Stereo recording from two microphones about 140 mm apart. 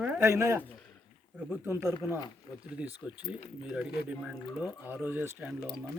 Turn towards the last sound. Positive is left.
turn(degrees=-10)  # may be behind; listen again after turning